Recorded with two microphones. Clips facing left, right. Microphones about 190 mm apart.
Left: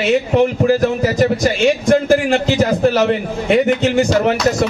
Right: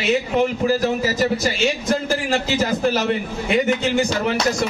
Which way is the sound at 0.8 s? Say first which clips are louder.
Left 5 dB; 50° left (ahead or behind).